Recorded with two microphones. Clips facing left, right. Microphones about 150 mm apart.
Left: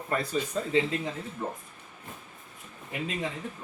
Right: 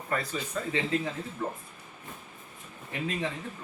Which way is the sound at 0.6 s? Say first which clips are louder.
Right 2 dB; 25° left (ahead or behind).